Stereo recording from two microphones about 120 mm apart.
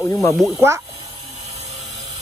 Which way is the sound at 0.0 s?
25° left (ahead or behind).